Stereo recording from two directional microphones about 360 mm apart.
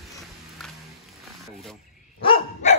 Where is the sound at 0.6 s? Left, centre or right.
Centre.